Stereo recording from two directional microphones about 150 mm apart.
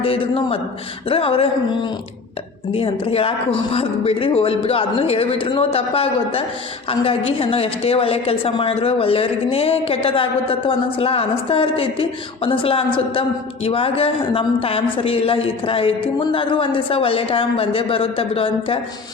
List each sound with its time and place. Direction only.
0.0 s a woman's voice: 40° left (ahead or behind)